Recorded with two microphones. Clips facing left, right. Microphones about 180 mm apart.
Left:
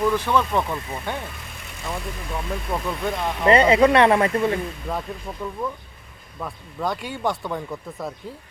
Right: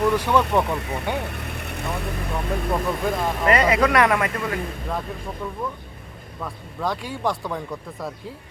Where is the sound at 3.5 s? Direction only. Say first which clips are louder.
Left 4 dB; 25° left (ahead or behind).